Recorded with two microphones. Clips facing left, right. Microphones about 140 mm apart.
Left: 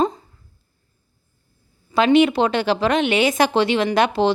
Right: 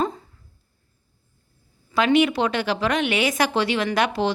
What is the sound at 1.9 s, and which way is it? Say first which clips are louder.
A woman's voice: left 4 dB; 25° left (ahead or behind).